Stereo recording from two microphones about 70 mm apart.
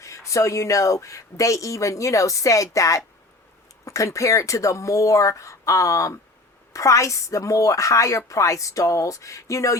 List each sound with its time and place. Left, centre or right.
0.0 s speech: left